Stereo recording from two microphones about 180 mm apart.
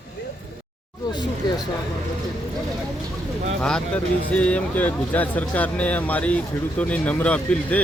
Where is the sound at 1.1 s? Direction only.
25° left (ahead or behind).